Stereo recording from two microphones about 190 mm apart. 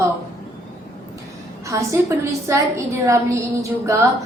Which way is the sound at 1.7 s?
15° right (ahead or behind).